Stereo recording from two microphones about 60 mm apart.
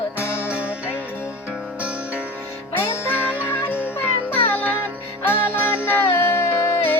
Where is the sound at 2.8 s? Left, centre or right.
Left.